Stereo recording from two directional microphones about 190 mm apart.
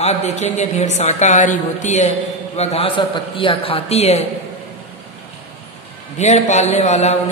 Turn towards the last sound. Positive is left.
turn(degrees=35)  # may be behind; listen again after turning